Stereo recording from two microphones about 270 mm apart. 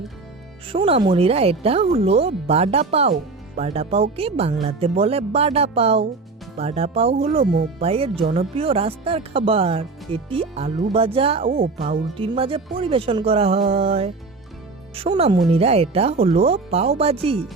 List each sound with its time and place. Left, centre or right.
0.7 s speech: right
11.5 s speech: right
12.1 s speech: centre
13.7 s speech: right
14.9 s speech: right